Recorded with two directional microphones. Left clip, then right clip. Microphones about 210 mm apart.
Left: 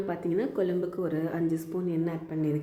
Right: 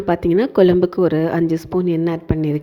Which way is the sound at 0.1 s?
45° right (ahead or behind).